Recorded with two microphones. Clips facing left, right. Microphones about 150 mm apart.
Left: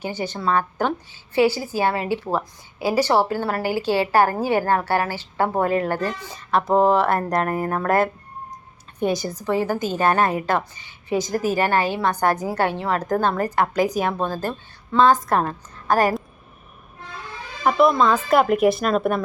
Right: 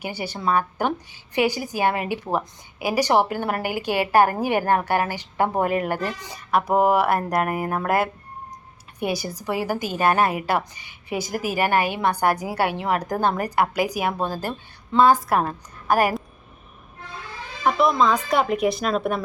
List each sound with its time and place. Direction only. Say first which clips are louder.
0.0 s a woman's voice: left 2 dB; 10° right (ahead or behind)
17.6 s speech: left 2 dB; 5° left (ahead or behind)